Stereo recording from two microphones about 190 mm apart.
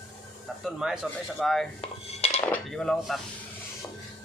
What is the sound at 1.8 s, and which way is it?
Dishes, 35° left (ahead or behind).